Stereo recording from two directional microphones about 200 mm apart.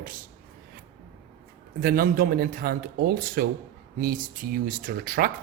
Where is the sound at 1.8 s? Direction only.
50° right (ahead or behind).